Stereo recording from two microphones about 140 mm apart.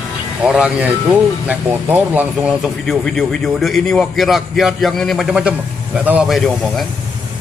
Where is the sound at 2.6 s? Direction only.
Centre (ahead or behind).